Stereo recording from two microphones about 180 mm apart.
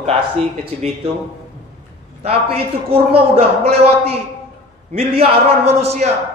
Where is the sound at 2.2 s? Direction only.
35° right (ahead or behind).